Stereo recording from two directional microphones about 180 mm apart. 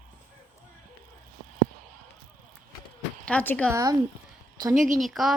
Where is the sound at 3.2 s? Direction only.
5° left (ahead or behind).